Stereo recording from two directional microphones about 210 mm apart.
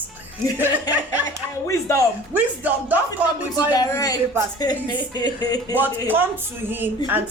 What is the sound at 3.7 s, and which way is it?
Speech, 15° left (ahead or behind).